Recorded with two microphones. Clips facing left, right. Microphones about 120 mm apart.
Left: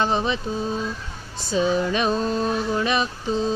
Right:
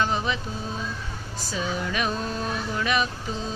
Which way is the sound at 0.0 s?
25° left (ahead or behind).